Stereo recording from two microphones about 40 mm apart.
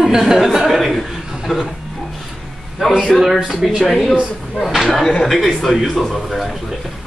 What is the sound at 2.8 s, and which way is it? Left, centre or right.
Speech, centre.